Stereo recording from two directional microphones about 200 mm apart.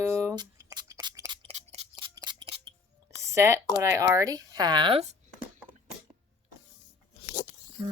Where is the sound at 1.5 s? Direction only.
35° right (ahead or behind).